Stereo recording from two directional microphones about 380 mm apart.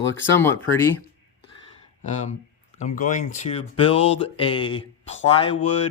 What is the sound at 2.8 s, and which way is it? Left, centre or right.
Speech, centre.